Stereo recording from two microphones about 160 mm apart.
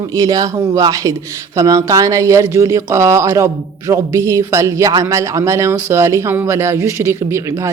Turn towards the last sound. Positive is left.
turn(degrees=-15)  # may be behind; listen again after turning